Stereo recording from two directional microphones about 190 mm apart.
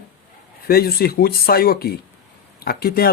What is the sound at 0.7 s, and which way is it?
Speech, 55° left (ahead or behind).